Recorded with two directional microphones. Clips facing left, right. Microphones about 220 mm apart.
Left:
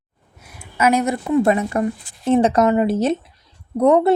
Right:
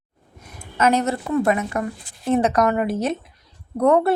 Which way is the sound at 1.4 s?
30° left (ahead or behind).